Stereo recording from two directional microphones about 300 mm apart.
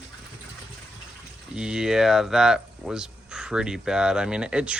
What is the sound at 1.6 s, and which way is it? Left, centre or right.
Speech, centre.